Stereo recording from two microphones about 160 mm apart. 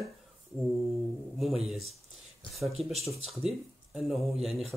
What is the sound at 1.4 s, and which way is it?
Speech, centre (ahead or behind).